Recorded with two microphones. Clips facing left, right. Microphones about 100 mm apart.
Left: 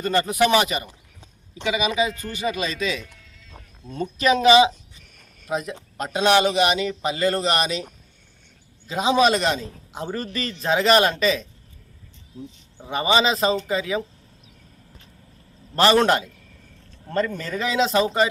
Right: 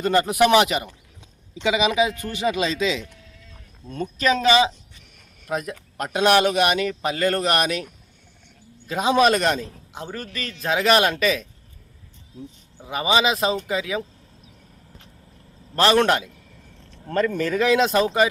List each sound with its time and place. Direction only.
0.1 s speech: 10° right (ahead or behind)
0.6 s speech: 85° right
1.9 s speech: 15° right (ahead or behind)
2.3 s speech: 85° right
2.7 s speech: 20° right (ahead or behind)
3.8 s speech: 5° left (ahead or behind)
8.9 s speech: centre (ahead or behind)
12.7 s speech: 5° right (ahead or behind)
15.7 s speech: centre (ahead or behind)